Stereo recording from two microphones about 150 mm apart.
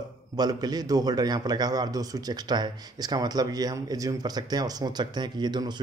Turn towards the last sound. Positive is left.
turn(degrees=-30)  # may be behind; listen again after turning